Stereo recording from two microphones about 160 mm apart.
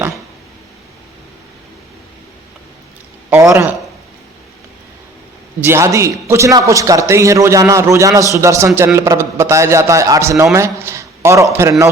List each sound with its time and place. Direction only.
3.2 s a man's voice: 15° right (ahead or behind)
5.5 s a man's voice: 15° right (ahead or behind)